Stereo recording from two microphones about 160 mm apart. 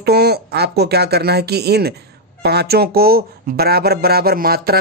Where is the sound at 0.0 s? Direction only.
80° right.